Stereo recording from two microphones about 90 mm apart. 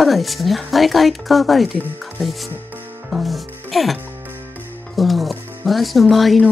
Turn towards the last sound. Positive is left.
turn(degrees=0)  # may be behind; listen again after turning